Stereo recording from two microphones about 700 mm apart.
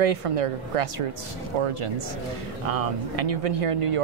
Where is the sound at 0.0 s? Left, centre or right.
Right.